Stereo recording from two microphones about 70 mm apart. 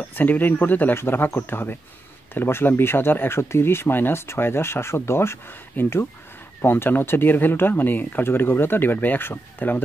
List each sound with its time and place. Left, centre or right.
0.1 s speech: left